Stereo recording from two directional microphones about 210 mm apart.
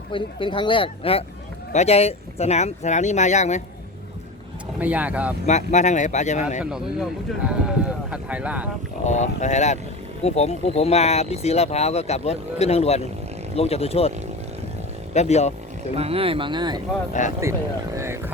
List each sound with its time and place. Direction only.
0.1 s speech: 25° left (ahead or behind)
4.8 s speech: 5° right (ahead or behind)
5.5 s speech: 35° left (ahead or behind)
6.6 s speech: 5° right (ahead or behind)
9.0 s speech: 35° left (ahead or behind)
15.1 s speech: 30° left (ahead or behind)
16.0 s speech: 30° right (ahead or behind)
17.2 s speech: 35° left (ahead or behind)
17.9 s speech: 15° right (ahead or behind)